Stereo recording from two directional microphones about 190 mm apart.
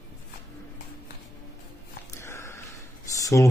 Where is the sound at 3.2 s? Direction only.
15° left (ahead or behind).